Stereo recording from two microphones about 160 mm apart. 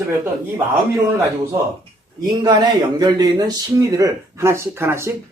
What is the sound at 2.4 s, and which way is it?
Speech, 25° right (ahead or behind).